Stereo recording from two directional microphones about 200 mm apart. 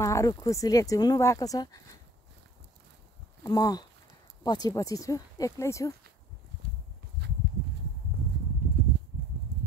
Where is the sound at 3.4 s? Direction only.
20° left (ahead or behind).